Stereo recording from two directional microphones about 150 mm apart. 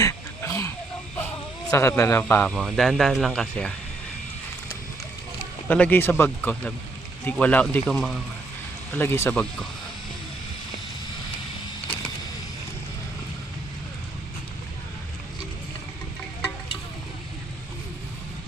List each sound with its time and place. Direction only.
0.0 s a sound: 20° left (ahead or behind)
1.7 s speech: 20° left (ahead or behind)
5.6 s speech: 10° left (ahead or behind)
8.9 s speech: 15° left (ahead or behind)